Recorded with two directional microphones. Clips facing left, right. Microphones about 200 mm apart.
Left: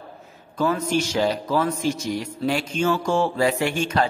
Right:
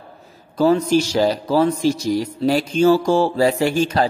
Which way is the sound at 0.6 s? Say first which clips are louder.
Right 7 dB; 35° right (ahead or behind).